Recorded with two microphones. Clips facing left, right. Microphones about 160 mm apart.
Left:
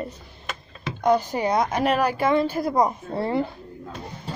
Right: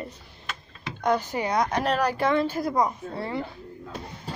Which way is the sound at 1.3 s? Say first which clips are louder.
Left 3 dB; 30° left (ahead or behind).